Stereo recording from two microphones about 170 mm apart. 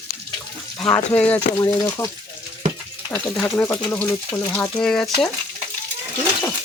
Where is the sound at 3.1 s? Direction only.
10° left (ahead or behind).